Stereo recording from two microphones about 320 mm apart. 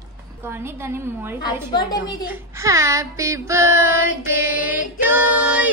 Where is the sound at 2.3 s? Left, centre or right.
Centre.